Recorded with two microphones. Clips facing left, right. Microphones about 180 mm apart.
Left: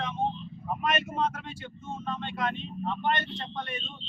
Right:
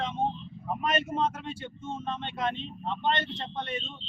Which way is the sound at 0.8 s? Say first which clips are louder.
Right 1 dB; 25° right (ahead or behind).